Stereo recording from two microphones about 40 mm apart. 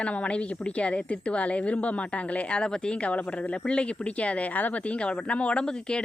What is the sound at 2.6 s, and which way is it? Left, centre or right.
Speech, left.